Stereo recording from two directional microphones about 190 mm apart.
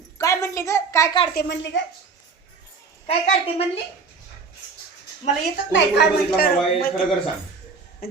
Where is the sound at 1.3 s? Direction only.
65° left (ahead or behind).